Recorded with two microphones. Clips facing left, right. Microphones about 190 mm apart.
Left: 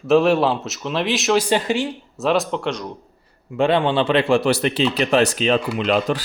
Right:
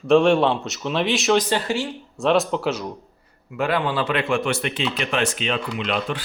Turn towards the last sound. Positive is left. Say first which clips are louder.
# left 6 dB
turn(degrees=40)  # may be behind; listen again after turning